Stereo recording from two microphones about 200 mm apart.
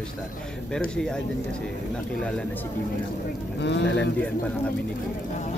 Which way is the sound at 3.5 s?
60° left (ahead or behind).